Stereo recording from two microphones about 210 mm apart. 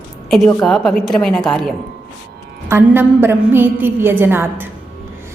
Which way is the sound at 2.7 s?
10° right (ahead or behind).